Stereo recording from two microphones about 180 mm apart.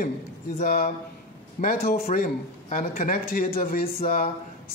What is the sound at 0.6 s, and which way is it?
Speech, 40° left (ahead or behind).